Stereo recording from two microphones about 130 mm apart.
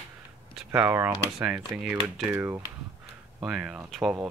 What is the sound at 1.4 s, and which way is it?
Speech, 5° right (ahead or behind).